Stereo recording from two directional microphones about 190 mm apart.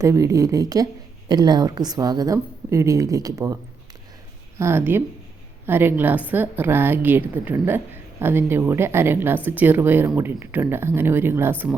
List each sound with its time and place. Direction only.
0.0 s a woman's voice: 15° right (ahead or behind)